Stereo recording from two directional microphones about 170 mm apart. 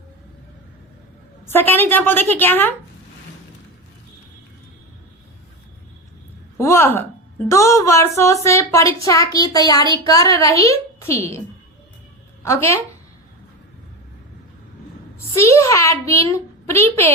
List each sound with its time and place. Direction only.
1.5 s speech: 10° left (ahead or behind)
6.6 s a woman's voice: 15° left (ahead or behind)
12.5 s speech: 15° left (ahead or behind)
15.4 s speech: 15° left (ahead or behind)